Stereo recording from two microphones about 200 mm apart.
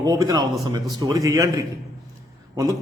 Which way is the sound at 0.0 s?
20° right (ahead or behind).